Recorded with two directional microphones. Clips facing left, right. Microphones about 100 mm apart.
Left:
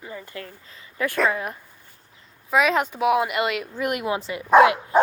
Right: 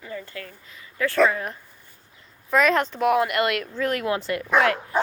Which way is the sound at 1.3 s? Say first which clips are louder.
Left 1 dB; 10° left (ahead or behind).